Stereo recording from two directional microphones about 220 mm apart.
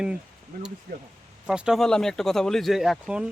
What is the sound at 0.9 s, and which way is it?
Speech, 40° right (ahead or behind).